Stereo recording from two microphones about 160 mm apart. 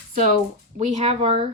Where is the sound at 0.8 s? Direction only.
40° right (ahead or behind).